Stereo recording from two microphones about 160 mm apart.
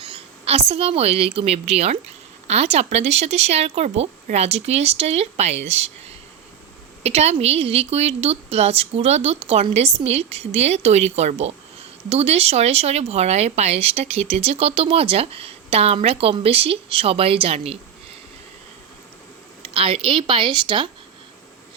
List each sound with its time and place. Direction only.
0.0 s a woman's voice: 40° right (ahead or behind)
19.6 s speech: 35° right (ahead or behind)